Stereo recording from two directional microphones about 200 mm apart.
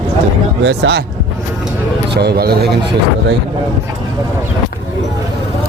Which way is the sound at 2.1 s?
55° right (ahead or behind).